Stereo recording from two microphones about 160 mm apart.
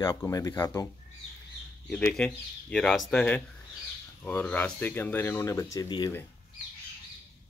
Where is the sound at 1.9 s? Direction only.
10° left (ahead or behind); by 6.1 s 25° left (ahead or behind).